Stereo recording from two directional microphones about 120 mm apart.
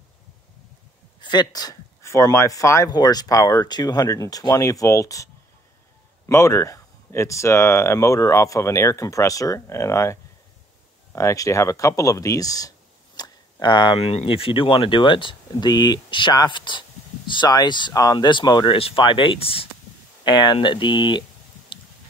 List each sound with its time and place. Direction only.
1.2 s speech: 35° left (ahead or behind)
11.1 s speech: 25° left (ahead or behind)
13.9 s speech: 55° left (ahead or behind); by 18.8 s 35° left (ahead or behind)
18.8 s speech: 50° left (ahead or behind)
20.2 s speech: 40° left (ahead or behind)